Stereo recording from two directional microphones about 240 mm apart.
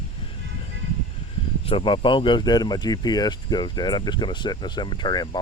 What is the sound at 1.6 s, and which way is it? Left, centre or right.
Speech, left.